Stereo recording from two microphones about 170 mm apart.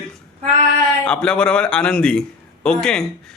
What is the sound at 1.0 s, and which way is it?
Speech, 5° left (ahead or behind).